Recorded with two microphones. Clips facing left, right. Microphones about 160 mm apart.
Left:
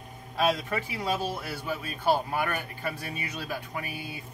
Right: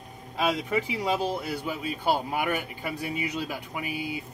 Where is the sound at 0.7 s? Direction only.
20° right (ahead or behind).